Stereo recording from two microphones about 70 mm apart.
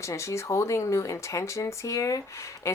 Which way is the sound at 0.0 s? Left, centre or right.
Left.